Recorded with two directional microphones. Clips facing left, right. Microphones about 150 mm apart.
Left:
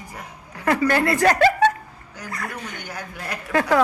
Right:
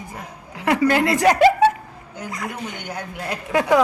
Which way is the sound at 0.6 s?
15° right (ahead or behind).